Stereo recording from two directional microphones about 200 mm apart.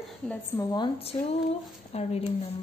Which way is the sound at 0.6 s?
20° left (ahead or behind).